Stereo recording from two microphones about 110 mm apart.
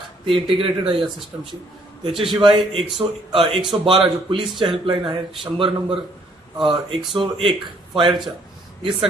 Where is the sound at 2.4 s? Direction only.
50° right (ahead or behind).